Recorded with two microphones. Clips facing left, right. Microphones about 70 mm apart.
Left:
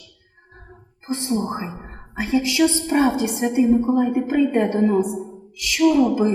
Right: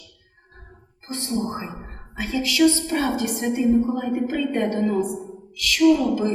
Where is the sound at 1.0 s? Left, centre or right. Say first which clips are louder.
Left 3 dB; left.